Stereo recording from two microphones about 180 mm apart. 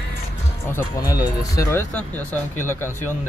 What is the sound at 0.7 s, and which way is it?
Speech, 15° left (ahead or behind).